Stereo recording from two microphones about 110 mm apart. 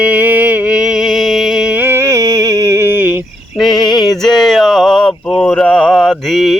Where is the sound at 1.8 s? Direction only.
25° right (ahead or behind).